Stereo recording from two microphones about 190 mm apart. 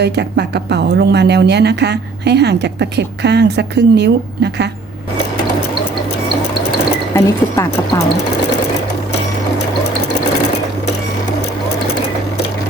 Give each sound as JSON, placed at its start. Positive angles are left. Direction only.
{"t": 0.0, "sound": "speech", "side_deg": -60}
{"t": 7.1, "sound": "speech", "side_deg": 15}